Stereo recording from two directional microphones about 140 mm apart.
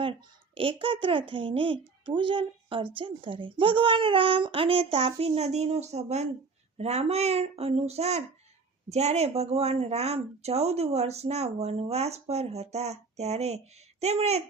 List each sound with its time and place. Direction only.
0.0 s a child's voice: 40° right (ahead or behind)